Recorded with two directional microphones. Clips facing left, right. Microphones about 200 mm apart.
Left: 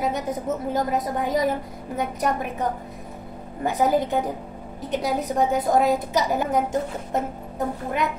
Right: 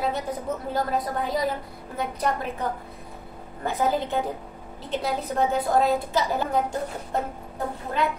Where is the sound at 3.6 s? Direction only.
20° left (ahead or behind).